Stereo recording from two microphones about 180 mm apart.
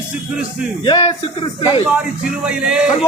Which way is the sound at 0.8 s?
25° left (ahead or behind).